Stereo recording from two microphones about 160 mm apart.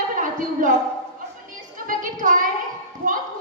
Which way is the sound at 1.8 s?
55° right (ahead or behind).